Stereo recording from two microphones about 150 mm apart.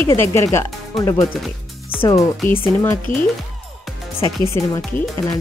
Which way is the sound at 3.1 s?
15° left (ahead or behind).